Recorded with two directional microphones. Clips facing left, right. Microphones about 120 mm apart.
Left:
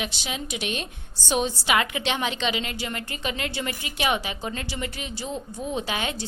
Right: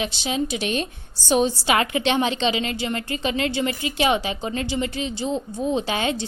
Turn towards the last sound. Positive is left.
turn(degrees=-25)  # may be behind; listen again after turning